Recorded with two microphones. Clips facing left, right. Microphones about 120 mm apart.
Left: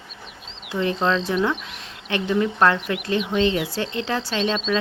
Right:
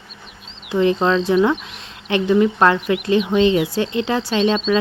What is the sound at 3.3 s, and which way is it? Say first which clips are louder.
Speech: right 4 dB; centre (ahead or behind).